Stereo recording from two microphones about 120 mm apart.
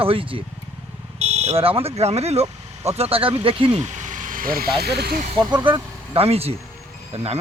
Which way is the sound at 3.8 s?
90° right.